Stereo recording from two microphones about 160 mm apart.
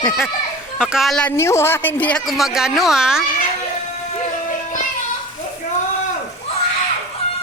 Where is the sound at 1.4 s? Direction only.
15° left (ahead or behind); by 3.2 s 5° right (ahead or behind).